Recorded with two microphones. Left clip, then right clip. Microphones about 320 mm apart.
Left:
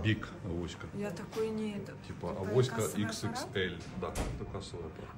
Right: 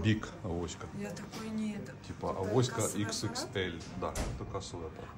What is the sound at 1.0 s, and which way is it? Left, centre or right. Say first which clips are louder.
Speech: left 10 dB; centre.